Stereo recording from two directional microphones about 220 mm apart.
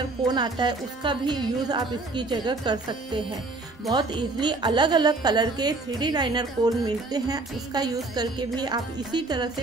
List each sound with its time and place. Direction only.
0.3 s speech: 20° right (ahead or behind)